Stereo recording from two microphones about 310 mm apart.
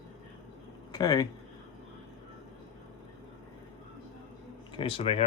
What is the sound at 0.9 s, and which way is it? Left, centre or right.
Speech, centre.